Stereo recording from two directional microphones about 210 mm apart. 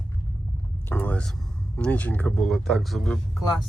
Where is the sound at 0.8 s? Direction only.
10° left (ahead or behind).